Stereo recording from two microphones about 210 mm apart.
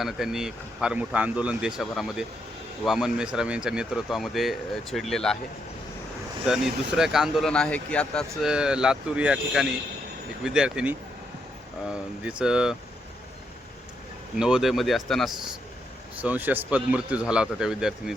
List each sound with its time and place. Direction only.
0.0 s speech: centre (ahead or behind)
6.4 s speech: centre (ahead or behind)
12.4 s speech: 5° right (ahead or behind)
14.3 s speech: 5° right (ahead or behind)